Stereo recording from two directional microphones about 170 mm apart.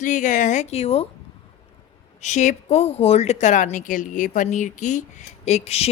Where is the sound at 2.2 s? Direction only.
45° left (ahead or behind).